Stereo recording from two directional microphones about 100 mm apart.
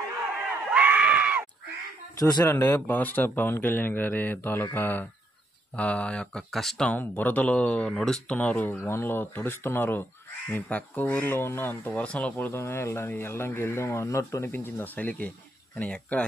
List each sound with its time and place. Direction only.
0.7 s a sound: 15° right (ahead or behind)
2.1 s speech: 40° left (ahead or behind)
2.4 s speech: 20° left (ahead or behind); by 7.0 s 5° left (ahead or behind)
7.0 s speech: 15° left (ahead or behind)